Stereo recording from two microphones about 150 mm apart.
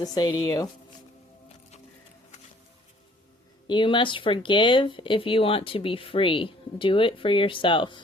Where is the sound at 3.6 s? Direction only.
30° left (ahead or behind).